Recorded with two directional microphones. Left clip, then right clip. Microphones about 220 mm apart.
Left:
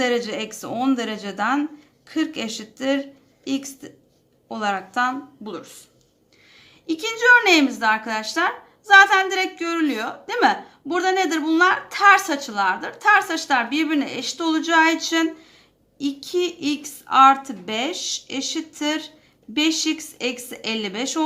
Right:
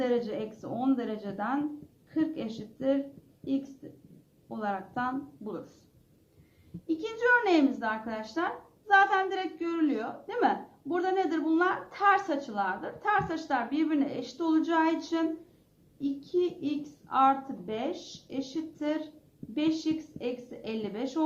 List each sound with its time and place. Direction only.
0.0 s a woman's voice: 20° left (ahead or behind)
4.4 s a woman's voice: 20° left (ahead or behind)
6.8 s a woman's voice: 20° left (ahead or behind)